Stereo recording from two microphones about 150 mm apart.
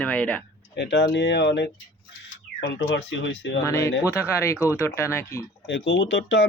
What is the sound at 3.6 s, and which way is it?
Speech, 20° left (ahead or behind).